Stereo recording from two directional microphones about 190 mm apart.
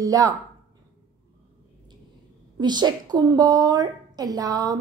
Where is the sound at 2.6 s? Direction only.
20° right (ahead or behind).